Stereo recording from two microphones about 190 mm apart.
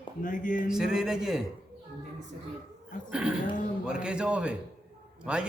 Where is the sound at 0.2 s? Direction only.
45° left (ahead or behind).